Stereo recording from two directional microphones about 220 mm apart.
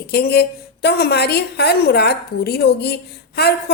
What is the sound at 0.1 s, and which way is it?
A woman's voice, 45° left (ahead or behind).